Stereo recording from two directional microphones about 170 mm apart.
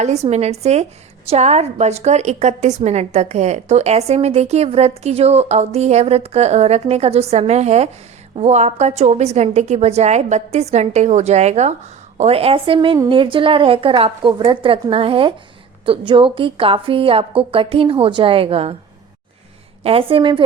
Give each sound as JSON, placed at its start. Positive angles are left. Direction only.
{"t": 0.0, "sound": "a woman's voice", "side_deg": -40}
{"t": 19.8, "sound": "a woman's voice", "side_deg": -35}